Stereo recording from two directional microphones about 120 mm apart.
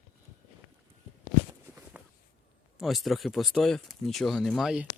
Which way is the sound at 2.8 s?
Centre (ahead or behind).